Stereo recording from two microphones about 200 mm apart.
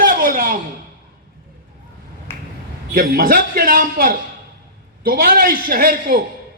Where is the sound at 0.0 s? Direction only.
45° right (ahead or behind).